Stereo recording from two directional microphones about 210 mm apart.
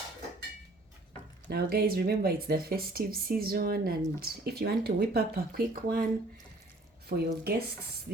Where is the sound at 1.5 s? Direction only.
45° right (ahead or behind).